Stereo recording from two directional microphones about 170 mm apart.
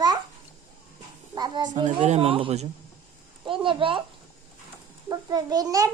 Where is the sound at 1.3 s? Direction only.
25° right (ahead or behind).